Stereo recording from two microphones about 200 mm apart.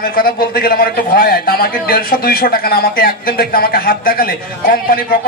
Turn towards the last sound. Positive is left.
turn(degrees=45)  # may be behind; listen again after turning